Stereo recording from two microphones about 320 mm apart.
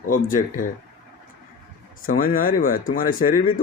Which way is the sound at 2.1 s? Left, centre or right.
Left.